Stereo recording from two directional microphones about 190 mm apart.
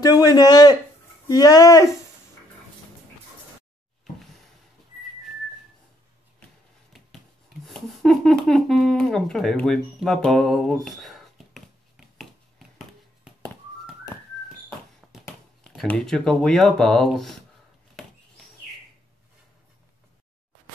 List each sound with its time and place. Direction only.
0.0 s a man's voice: 20° left (ahead or behind)
7.6 s a sound: centre (ahead or behind)
14.1 s whistling: 15° left (ahead or behind)
15.6 s speech: centre (ahead or behind)
18.0 s bird: centre (ahead or behind)